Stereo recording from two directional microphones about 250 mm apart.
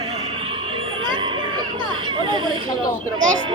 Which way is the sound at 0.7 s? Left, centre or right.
Centre.